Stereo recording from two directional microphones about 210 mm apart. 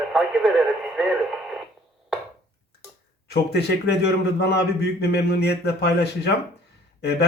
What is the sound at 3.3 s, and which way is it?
Speech, 50° left (ahead or behind).